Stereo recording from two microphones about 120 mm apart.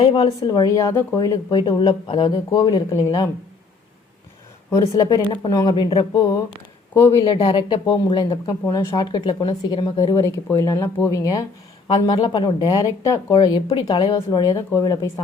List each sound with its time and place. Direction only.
0.0 s speech: 40° left (ahead or behind)
4.7 s speech: 25° left (ahead or behind)
13.7 s speech: 40° left (ahead or behind)